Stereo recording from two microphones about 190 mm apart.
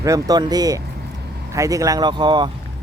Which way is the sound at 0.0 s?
20° right (ahead or behind).